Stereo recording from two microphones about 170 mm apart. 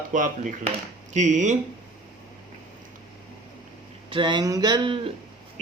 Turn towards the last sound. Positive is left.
turn(degrees=-30)  # may be behind; listen again after turning